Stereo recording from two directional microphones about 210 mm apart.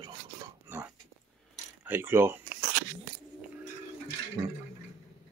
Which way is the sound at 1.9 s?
10° right (ahead or behind).